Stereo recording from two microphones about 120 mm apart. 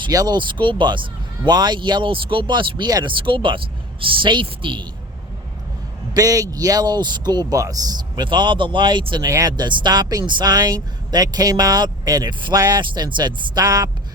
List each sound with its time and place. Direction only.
0.1 s a woman's voice: 30° right (ahead or behind)
6.1 s speech: 30° right (ahead or behind)